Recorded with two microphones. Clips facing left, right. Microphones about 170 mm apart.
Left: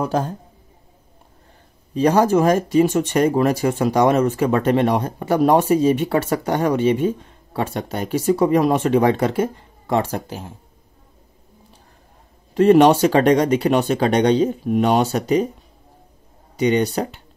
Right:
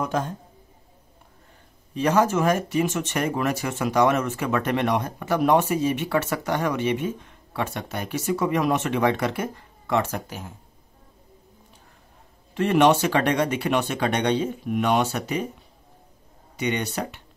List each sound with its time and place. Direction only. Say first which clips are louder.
0.0 s speech: left 5 dB; 35° left (ahead or behind)
2.0 s speech: left 5 dB; 35° left (ahead or behind)
12.5 s speech: left 7 dB; 35° left (ahead or behind)
16.5 s speech: left 8 dB; 35° left (ahead or behind)